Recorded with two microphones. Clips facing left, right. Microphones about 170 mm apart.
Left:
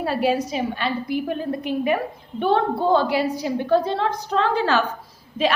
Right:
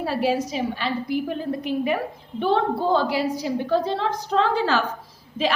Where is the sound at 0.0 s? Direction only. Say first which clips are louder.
Left 1 dB; 60° left (ahead or behind).